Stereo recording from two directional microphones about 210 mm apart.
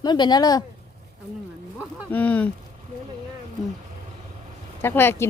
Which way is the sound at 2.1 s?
5° left (ahead or behind).